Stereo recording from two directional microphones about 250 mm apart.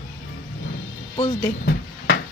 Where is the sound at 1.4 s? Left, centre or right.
Left.